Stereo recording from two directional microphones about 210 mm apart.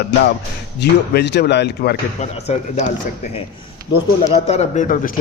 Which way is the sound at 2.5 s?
30° left (ahead or behind).